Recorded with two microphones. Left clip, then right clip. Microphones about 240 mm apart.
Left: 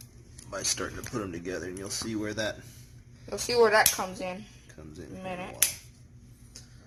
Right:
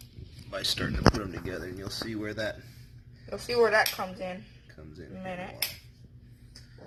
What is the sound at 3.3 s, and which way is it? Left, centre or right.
Speech, left.